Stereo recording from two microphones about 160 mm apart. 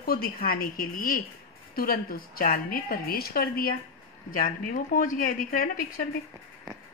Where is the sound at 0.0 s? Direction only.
70° left (ahead or behind).